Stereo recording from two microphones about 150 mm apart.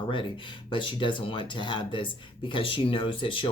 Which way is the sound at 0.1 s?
35° left (ahead or behind).